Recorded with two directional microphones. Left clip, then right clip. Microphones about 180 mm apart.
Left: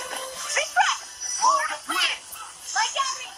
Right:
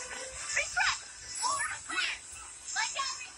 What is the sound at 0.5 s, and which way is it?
Music, 35° left (ahead or behind).